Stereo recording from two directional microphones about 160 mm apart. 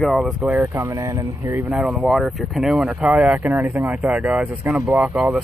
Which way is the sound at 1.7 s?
Centre (ahead or behind).